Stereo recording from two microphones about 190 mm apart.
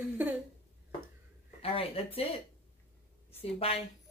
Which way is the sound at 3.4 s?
30° left (ahead or behind).